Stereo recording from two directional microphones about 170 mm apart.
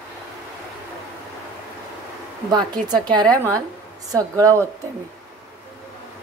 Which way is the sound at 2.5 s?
25° right (ahead or behind).